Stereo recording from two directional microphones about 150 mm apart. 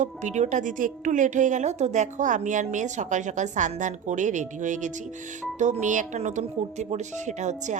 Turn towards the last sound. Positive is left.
turn(degrees=-50)  # may be behind; listen again after turning